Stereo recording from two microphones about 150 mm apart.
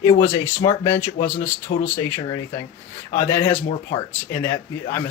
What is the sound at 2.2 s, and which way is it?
Speech, 30° left (ahead or behind).